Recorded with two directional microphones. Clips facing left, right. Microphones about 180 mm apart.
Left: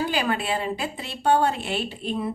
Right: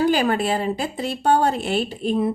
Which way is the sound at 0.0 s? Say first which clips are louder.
Right 6 dB; 40° right (ahead or behind).